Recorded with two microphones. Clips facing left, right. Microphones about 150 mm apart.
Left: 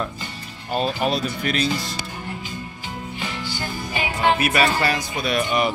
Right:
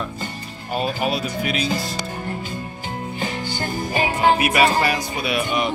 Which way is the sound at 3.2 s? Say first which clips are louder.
Right 3 dB; 45° right (ahead or behind).